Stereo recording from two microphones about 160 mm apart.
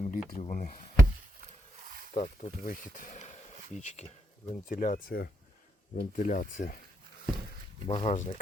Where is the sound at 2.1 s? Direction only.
45° left (ahead or behind).